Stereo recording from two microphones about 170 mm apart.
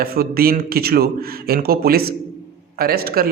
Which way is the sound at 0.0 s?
60° right (ahead or behind).